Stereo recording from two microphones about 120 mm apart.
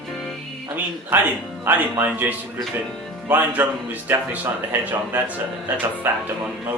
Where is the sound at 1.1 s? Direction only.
15° right (ahead or behind).